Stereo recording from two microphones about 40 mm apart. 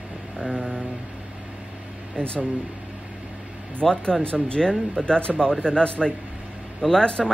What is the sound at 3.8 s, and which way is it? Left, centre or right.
Speech, left.